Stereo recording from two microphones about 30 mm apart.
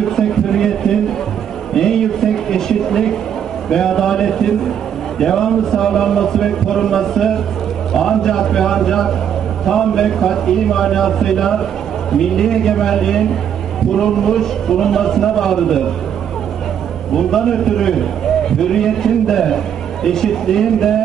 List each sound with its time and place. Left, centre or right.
0.0 s a sound: centre
5.2 s a man's voice: centre
17.3 s a man's voice: centre